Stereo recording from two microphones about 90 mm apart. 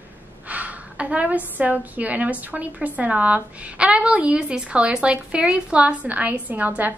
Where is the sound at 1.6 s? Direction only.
15° right (ahead or behind).